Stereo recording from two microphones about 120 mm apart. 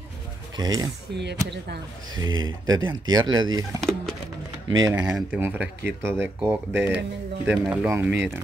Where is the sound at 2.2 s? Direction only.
35° right (ahead or behind).